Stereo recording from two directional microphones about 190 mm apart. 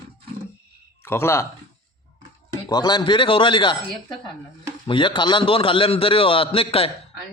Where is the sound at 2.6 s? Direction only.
20° left (ahead or behind).